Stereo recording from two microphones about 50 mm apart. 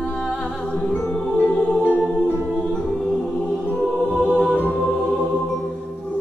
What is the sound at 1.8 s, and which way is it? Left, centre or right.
Music, left.